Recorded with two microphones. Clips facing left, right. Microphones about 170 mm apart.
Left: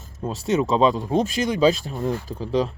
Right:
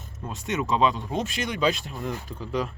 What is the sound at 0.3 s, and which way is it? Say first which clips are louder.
Speech: left 6 dB; 35° left (ahead or behind).